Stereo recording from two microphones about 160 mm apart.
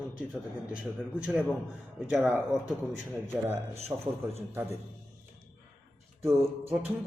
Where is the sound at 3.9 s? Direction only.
20° right (ahead or behind).